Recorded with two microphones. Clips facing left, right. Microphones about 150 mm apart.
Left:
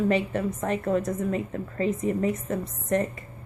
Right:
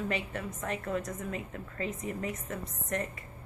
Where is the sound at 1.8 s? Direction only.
35° left (ahead or behind).